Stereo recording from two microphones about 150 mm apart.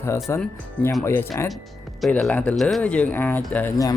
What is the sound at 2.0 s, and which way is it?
Speech, 5° left (ahead or behind).